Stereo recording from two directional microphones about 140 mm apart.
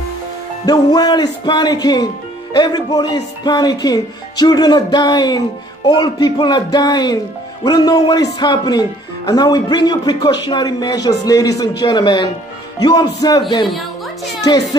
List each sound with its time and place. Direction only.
0.7 s speech: 30° left (ahead or behind)
14.4 s speech: 25° left (ahead or behind)